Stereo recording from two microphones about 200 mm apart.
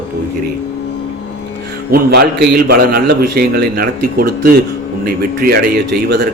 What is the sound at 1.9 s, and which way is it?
A man's voice, 50° right (ahead or behind).